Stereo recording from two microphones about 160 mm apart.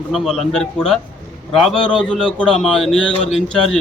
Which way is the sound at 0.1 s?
Centre (ahead or behind).